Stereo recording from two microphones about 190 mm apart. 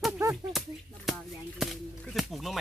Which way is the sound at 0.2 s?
15° right (ahead or behind).